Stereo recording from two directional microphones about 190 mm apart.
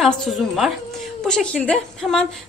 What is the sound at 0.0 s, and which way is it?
A woman's voice, centre (ahead or behind).